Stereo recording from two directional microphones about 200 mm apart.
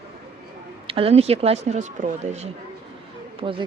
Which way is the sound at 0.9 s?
30° right (ahead or behind).